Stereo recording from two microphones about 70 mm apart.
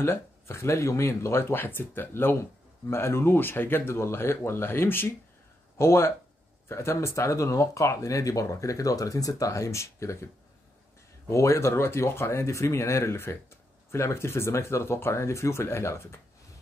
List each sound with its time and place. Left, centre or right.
0.0 s speech: left
11.2 s speech: left